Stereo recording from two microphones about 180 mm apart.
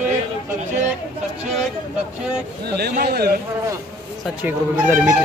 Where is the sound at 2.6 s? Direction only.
60° right (ahead or behind).